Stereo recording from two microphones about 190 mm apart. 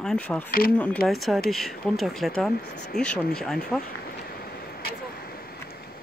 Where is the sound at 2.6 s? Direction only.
60° left (ahead or behind).